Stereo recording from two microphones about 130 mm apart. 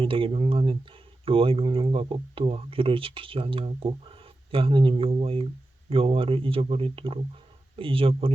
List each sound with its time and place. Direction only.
0.0 s speech: 45° right (ahead or behind)